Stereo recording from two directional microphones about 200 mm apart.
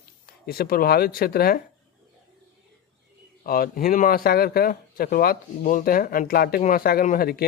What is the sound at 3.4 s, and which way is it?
A man's voice, 45° left (ahead or behind).